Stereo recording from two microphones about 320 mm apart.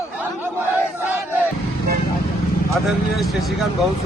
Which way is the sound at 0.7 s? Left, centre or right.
Centre.